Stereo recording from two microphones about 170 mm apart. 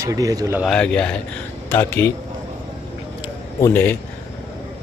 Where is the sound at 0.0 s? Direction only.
20° right (ahead or behind).